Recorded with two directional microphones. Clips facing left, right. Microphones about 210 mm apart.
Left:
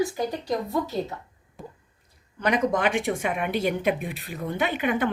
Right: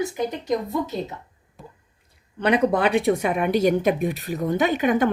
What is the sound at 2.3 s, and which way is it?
Speech, 30° right (ahead or behind).